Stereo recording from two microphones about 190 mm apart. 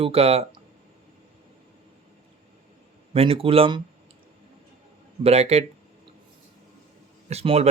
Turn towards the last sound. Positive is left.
turn(degrees=-35)  # may be behind; listen again after turning